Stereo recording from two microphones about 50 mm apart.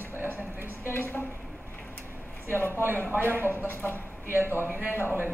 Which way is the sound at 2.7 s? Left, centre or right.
Right.